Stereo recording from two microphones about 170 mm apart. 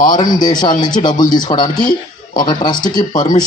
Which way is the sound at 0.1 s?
25° left (ahead or behind).